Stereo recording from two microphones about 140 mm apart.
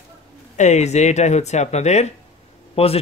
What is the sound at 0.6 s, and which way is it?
Speech, 55° left (ahead or behind).